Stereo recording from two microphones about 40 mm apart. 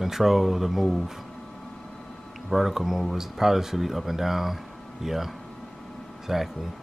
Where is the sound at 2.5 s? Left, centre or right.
Centre.